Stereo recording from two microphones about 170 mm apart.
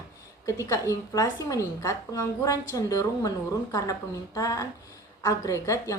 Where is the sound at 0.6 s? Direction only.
20° left (ahead or behind).